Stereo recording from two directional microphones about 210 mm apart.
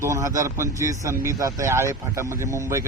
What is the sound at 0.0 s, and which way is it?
Speech, 15° right (ahead or behind).